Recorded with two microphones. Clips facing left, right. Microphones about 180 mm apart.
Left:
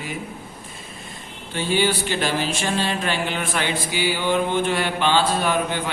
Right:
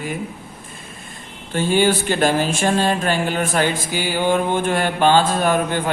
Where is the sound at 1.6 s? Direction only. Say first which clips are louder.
Right 4 dB; 50° right (ahead or behind).